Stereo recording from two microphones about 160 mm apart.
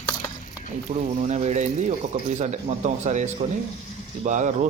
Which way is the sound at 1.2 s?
45° right (ahead or behind).